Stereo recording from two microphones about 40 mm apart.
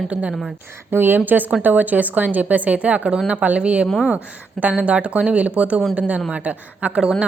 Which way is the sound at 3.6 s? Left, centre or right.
Right.